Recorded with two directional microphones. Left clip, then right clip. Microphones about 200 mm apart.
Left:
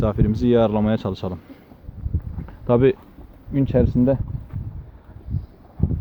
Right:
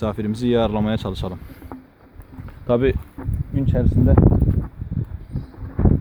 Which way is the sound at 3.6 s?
25° left (ahead or behind).